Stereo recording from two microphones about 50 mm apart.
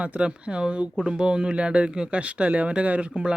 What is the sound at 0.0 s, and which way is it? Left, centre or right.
A man's voice, right.